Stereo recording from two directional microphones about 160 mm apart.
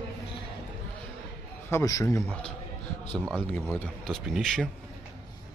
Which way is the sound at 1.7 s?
20° left (ahead or behind).